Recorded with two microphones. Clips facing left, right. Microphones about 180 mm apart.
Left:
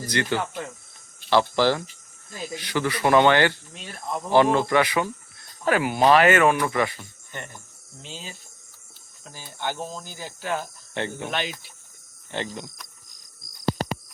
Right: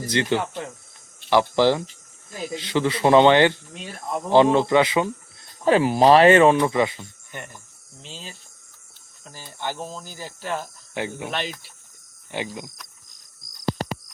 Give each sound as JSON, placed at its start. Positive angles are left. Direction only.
{"t": 0.0, "sound": "speech", "side_deg": -20}
{"t": 7.3, "sound": "speech", "side_deg": -5}
{"t": 12.3, "sound": "cricket", "side_deg": -10}